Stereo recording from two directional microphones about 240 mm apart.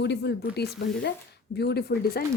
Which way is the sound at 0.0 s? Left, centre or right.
Left.